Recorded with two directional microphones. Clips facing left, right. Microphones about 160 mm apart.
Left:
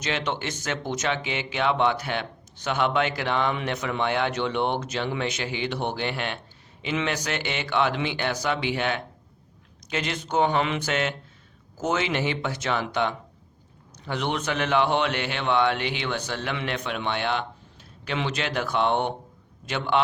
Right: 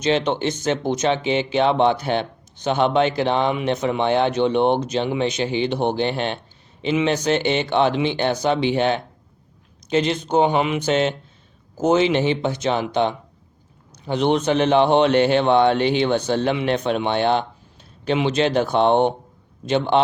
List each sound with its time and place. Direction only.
0.0 s speech: 20° right (ahead or behind)